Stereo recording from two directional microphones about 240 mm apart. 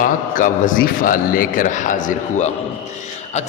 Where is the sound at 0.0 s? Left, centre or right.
Left.